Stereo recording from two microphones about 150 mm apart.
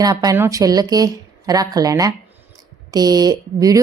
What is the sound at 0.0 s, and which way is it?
Speech, 25° right (ahead or behind).